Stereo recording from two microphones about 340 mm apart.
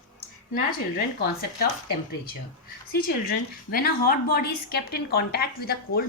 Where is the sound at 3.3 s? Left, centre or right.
Left.